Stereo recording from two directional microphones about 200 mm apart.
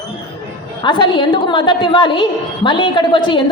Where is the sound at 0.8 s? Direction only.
25° left (ahead or behind).